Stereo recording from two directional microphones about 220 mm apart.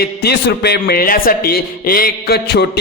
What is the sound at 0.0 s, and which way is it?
A man's voice, 45° left (ahead or behind).